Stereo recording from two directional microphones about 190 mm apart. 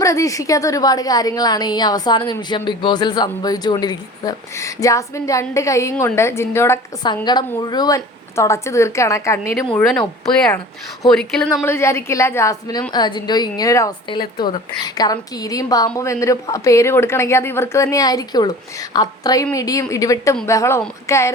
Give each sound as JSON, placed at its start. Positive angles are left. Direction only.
{"t": 0.0, "sound": "a woman's voice", "side_deg": 15}
{"t": 9.7, "sound": "speech", "side_deg": 5}
{"t": 11.0, "sound": "speech", "side_deg": 5}
{"t": 11.6, "sound": "a woman's voice", "side_deg": 15}